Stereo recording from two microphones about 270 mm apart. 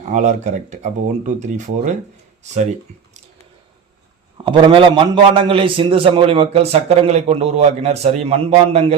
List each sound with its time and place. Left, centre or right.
0.1 s a man's voice: right
4.4 s a man's voice: centre